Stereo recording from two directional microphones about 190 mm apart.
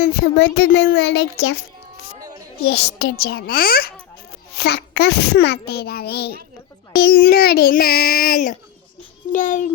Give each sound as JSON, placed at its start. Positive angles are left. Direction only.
{"t": 0.0, "sound": "a child's voice", "side_deg": 60}
{"t": 2.6, "sound": "a child's voice", "side_deg": 60}